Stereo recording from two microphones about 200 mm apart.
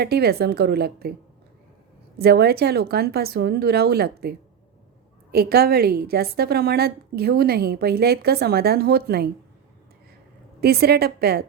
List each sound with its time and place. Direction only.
0.0 s a woman's voice: 50° right (ahead or behind)
2.1 s a woman's voice: 55° right (ahead or behind)
10.6 s a woman's voice: 50° right (ahead or behind)